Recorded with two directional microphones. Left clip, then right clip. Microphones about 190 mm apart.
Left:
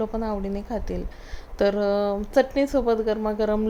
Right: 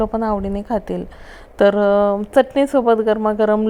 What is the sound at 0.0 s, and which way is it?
A woman's voice, 25° right (ahead or behind).